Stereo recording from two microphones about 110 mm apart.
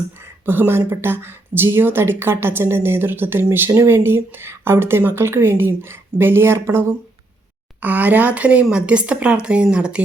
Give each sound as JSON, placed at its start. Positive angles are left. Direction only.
{"t": 0.4, "sound": "a woman's voice", "side_deg": -20}